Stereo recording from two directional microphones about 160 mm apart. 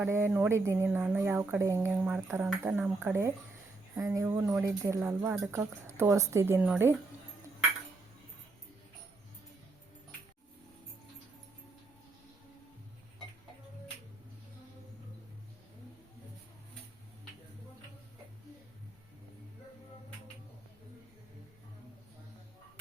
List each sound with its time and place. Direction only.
0.0 s speech: 15° right (ahead or behind)